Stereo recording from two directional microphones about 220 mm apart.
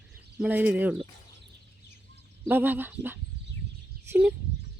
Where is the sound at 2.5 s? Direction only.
10° right (ahead or behind).